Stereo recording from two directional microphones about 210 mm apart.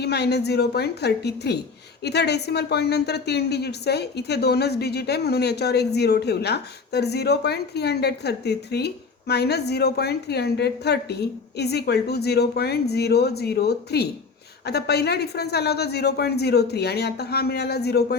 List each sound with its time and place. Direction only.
0.0 s speech: 50° left (ahead or behind)